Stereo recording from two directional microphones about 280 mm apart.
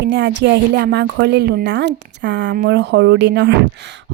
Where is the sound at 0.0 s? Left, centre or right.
Right.